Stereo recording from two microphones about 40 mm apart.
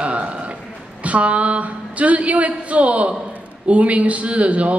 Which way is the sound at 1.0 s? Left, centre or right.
Right.